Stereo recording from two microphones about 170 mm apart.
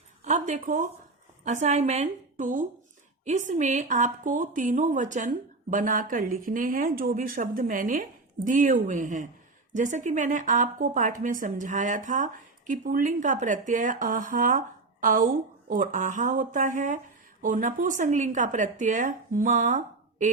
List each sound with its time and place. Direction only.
0.3 s speech: 45° right (ahead or behind)
1.5 s a woman's voice: 40° right (ahead or behind)